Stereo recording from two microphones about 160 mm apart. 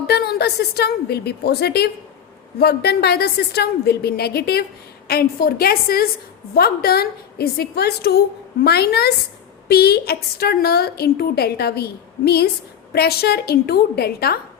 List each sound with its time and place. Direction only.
0.1 s a woman's voice: 80° left